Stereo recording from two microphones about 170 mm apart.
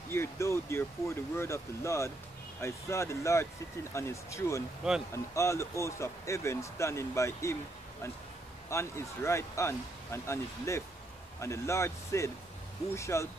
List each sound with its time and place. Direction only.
0.1 s speech: 15° left (ahead or behind)
8.6 s speech: 15° left (ahead or behind)